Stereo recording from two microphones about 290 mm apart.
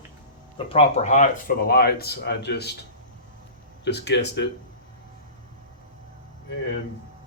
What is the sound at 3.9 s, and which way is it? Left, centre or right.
Speech, left.